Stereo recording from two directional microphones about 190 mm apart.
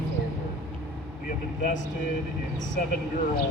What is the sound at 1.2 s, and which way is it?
Speech, 45° left (ahead or behind).